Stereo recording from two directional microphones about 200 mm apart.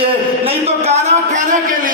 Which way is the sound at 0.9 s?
35° right (ahead or behind).